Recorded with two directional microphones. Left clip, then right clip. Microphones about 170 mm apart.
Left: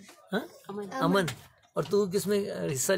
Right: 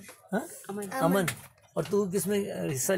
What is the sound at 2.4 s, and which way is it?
Speech, 10° right (ahead or behind).